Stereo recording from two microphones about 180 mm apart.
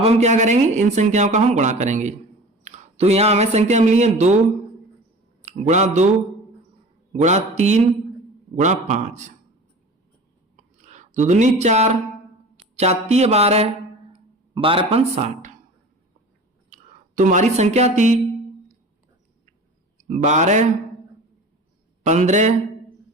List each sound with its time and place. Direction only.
0.0 s speech: 40° right (ahead or behind)
5.5 s speech: 40° right (ahead or behind)
7.1 s speech: 40° right (ahead or behind)
10.6 s a sound: 40° right (ahead or behind)
12.7 s speech: 35° right (ahead or behind)
14.1 s music: 30° right (ahead or behind)
16.6 s speech: 45° right (ahead or behind)
20.0 s a man's voice: 40° right (ahead or behind)
22.0 s speech: 40° right (ahead or behind)